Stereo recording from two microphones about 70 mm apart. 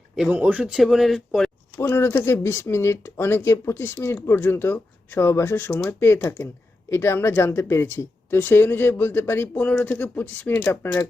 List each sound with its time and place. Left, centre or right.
0.3 s speech: right
0.6 s speech: centre
1.9 s speech: left
9.6 s speech: left